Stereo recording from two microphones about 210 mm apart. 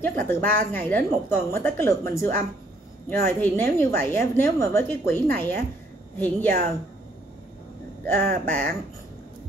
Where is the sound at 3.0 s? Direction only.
10° left (ahead or behind).